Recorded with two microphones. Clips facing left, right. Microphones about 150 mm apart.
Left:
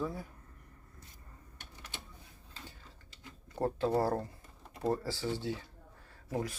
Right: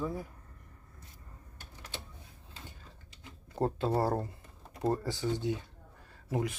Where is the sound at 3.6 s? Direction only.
25° right (ahead or behind).